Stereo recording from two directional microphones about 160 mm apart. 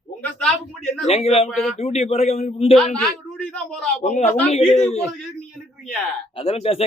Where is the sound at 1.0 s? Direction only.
40° left (ahead or behind).